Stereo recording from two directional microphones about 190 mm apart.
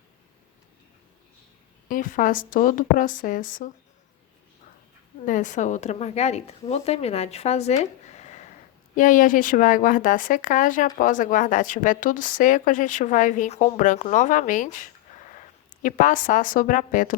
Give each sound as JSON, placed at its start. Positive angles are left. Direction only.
{"t": 1.9, "sound": "speech", "side_deg": 45}
{"t": 5.2, "sound": "speech", "side_deg": 45}